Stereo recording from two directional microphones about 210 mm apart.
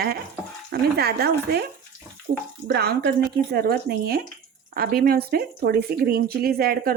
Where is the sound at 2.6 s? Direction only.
50° right (ahead or behind).